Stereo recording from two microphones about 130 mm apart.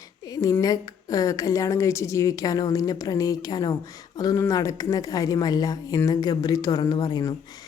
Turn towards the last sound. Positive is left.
turn(degrees=30)  # may be behind; listen again after turning